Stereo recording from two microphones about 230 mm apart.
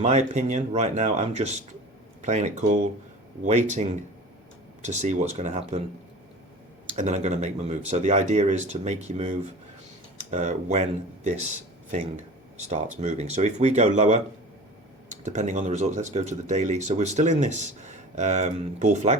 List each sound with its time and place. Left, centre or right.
0.0 s speech: right
6.8 s speech: right
10.3 s speech: right